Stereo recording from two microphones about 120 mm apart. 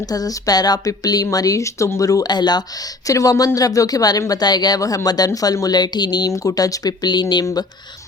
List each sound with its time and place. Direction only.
0.0 s a woman's voice: 30° left (ahead or behind)